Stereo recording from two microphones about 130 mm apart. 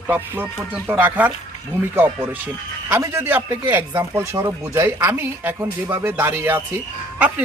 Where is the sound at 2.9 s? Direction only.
20° right (ahead or behind).